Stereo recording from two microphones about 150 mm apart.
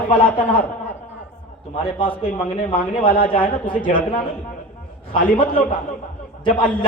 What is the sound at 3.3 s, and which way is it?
Speech, 40° left (ahead or behind).